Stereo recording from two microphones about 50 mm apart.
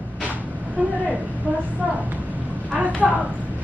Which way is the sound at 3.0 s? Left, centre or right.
Centre.